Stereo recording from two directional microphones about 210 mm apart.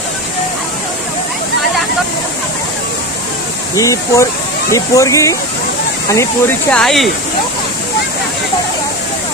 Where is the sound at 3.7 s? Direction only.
15° left (ahead or behind).